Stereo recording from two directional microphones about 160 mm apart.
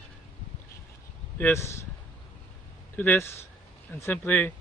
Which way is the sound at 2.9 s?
10° left (ahead or behind).